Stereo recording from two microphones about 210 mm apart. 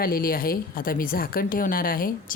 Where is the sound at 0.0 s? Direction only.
45° left (ahead or behind).